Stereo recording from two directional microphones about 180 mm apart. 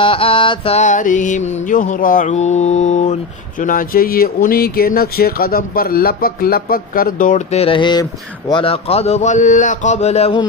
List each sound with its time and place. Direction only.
0.0 s mantra: 30° left (ahead or behind)
3.6 s speech: 50° left (ahead or behind); by 10.4 s 35° left (ahead or behind)